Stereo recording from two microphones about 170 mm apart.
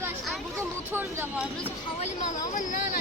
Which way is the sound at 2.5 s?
50° left (ahead or behind).